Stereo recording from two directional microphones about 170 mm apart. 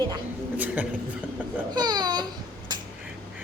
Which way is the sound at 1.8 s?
25° right (ahead or behind).